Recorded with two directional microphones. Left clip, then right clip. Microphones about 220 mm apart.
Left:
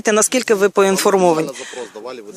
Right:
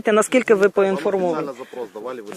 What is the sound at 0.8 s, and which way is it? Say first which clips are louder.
Speech: left 5 dB; 35° left (ahead or behind).